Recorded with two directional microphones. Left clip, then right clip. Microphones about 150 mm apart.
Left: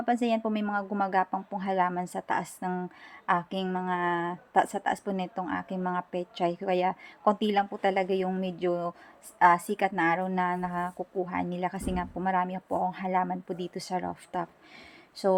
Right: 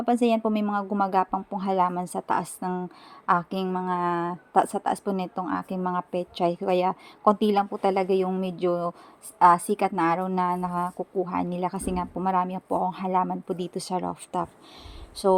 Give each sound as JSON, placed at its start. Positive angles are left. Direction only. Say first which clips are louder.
{"t": 0.0, "sound": "a woman's voice", "louder": "right 4 dB", "side_deg": -30}